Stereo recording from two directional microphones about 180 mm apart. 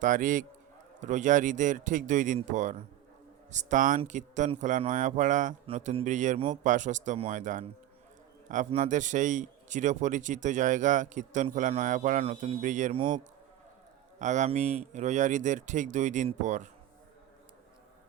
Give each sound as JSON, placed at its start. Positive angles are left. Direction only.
{"t": 0.0, "sound": "a man's voice", "side_deg": -45}